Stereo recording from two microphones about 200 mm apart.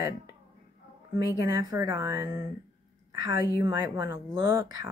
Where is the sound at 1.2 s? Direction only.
20° right (ahead or behind).